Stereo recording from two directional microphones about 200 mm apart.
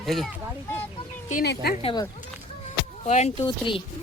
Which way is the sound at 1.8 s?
25° left (ahead or behind).